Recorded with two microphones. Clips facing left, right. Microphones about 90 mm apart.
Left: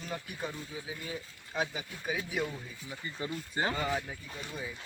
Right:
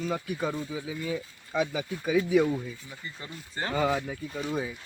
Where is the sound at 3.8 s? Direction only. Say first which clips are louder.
Right 6 dB; 90° right.